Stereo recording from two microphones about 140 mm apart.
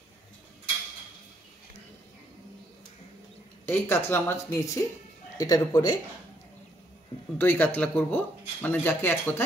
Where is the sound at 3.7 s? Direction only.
15° left (ahead or behind).